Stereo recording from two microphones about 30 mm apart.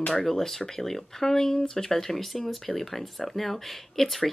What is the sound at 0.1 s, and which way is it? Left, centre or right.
Speech, centre.